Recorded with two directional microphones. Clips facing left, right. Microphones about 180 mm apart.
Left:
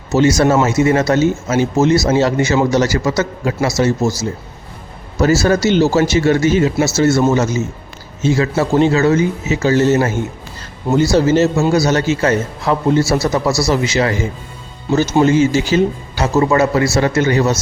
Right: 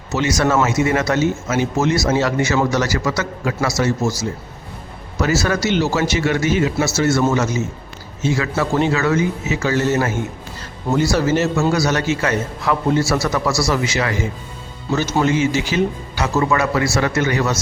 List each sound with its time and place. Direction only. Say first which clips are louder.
0.1 s speech: left 6 dB; 30° left (ahead or behind)
5.2 s speech: left 6 dB; 30° left (ahead or behind)
15.2 s speech: left 5 dB; 35° left (ahead or behind)